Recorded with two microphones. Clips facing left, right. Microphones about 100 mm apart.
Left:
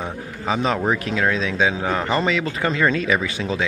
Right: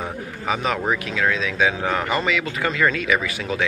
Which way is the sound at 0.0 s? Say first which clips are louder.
Even; 25° left (ahead or behind).